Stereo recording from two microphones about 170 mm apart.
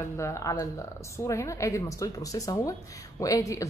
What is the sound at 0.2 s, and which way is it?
A woman's voice, 20° left (ahead or behind).